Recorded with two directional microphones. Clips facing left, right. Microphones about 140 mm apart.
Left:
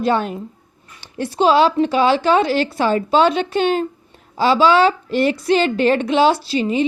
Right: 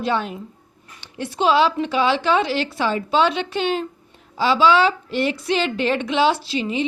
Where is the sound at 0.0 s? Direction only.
45° left (ahead or behind).